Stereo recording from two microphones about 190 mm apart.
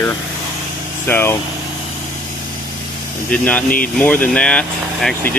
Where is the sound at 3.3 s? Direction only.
10° left (ahead or behind).